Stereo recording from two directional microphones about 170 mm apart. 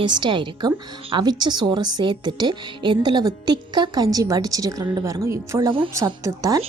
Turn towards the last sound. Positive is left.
turn(degrees=-20)  # may be behind; listen again after turning